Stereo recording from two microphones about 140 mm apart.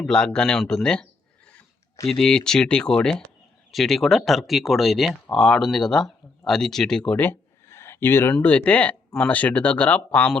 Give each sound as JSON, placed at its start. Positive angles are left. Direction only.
{"t": 0.0, "sound": "speech", "side_deg": 5}
{"t": 2.0, "sound": "speech", "side_deg": 5}